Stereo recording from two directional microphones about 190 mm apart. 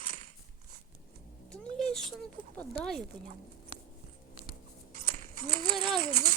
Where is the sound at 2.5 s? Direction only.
5° left (ahead or behind).